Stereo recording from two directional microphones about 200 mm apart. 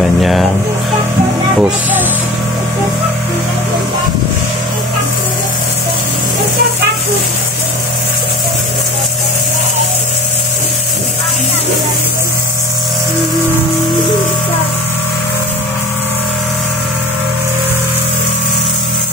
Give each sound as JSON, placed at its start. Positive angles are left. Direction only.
{"t": 0.0, "sound": "speech", "side_deg": 0}
{"t": 1.6, "sound": "speech", "side_deg": -10}